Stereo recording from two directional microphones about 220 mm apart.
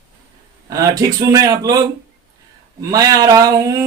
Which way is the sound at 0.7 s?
15° right (ahead or behind).